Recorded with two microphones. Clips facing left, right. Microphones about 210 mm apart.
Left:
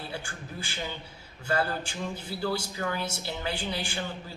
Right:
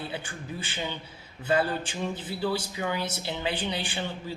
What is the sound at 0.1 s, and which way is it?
Speech, 20° right (ahead or behind).